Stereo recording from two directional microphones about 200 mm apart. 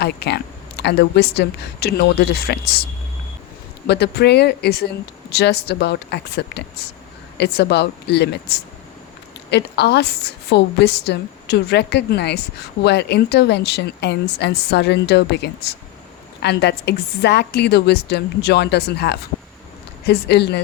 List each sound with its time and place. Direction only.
0.0 s a woman's voice: 55° left (ahead or behind)
3.8 s a woman's voice: 55° left (ahead or behind)